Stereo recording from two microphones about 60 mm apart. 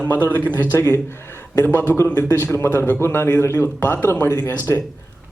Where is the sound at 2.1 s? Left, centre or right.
Left.